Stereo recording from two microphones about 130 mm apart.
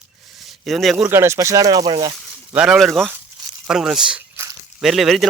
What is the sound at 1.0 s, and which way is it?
Speech, 20° right (ahead or behind).